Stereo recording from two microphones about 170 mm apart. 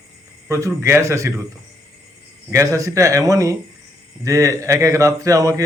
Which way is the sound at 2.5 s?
20° right (ahead or behind).